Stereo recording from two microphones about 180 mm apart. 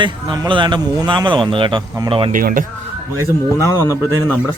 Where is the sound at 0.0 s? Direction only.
25° right (ahead or behind).